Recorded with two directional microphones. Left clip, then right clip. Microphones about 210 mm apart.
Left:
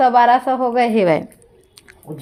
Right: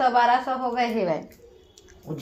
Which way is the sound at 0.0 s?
55° left (ahead or behind).